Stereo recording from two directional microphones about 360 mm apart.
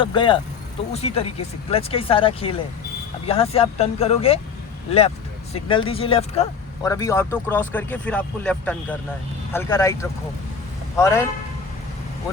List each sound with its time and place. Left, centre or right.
0.0 s speech: centre